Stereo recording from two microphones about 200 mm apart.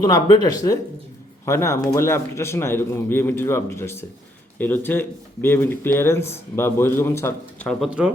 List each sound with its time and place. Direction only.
0.0 s speech: 20° left (ahead or behind)
7.9 s speech: 5° right (ahead or behind)